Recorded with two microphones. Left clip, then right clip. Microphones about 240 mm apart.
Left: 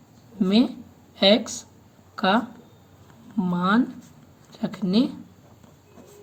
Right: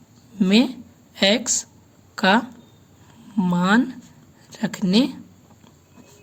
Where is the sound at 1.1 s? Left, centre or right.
Right.